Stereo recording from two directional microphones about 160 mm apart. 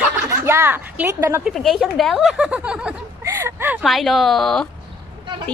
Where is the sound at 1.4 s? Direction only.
Centre (ahead or behind).